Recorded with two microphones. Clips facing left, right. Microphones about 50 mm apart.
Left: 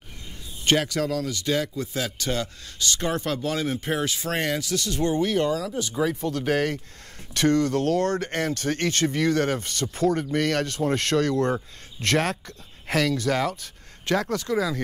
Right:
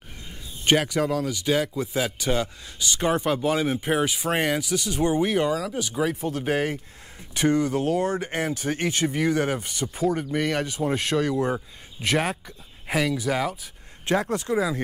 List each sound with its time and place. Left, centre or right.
0.7 s speech: centre
14.0 s speech: right